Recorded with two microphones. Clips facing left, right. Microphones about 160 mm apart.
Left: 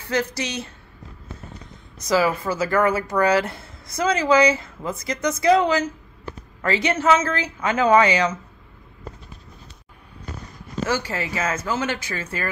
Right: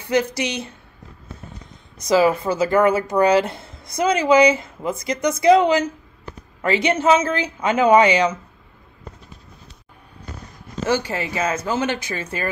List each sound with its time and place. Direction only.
0.0 s speech: 15° right (ahead or behind)
2.0 s speech: 20° right (ahead or behind)
10.9 s speech: 20° right (ahead or behind)